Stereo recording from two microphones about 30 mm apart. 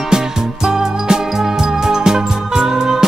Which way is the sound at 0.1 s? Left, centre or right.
Right.